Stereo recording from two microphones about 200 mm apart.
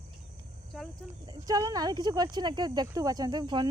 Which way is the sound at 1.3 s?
20° right (ahead or behind).